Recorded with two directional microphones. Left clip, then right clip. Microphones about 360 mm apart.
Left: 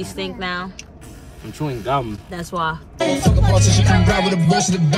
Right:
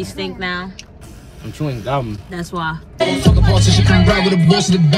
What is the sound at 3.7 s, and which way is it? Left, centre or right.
Music, right.